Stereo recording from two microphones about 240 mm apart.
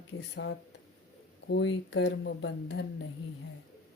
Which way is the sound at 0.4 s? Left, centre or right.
Left.